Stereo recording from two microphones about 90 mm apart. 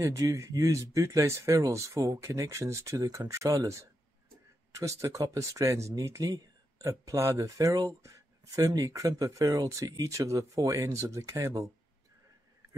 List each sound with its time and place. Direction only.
0.0 s speech: 35° right (ahead or behind)